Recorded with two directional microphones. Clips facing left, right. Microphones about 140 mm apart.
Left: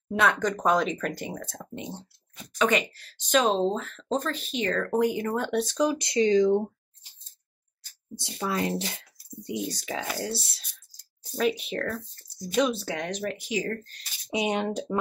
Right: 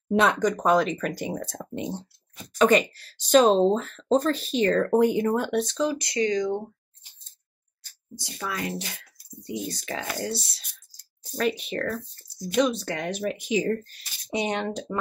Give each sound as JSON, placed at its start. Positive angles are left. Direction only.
{"t": 0.1, "sound": "speech", "side_deg": -25}
{"t": 0.4, "sound": "speech", "side_deg": -10}
{"t": 1.3, "sound": "speech", "side_deg": -30}
{"t": 5.5, "sound": "speech", "side_deg": 0}
{"t": 5.8, "sound": "speech", "side_deg": 20}
{"t": 8.2, "sound": "speech", "side_deg": 25}
{"t": 9.7, "sound": "speech", "side_deg": 5}
{"t": 13.2, "sound": "speech", "side_deg": -15}
{"t": 14.1, "sound": "speech", "side_deg": 5}